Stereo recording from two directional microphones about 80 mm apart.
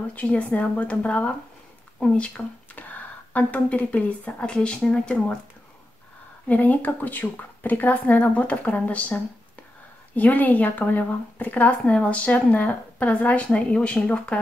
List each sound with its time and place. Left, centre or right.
0.1 s speech: centre
6.4 s speech: centre